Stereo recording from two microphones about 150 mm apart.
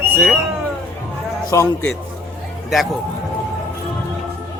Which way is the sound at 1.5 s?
20° left (ahead or behind).